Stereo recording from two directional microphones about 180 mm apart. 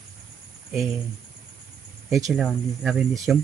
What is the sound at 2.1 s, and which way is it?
Speech, centre (ahead or behind).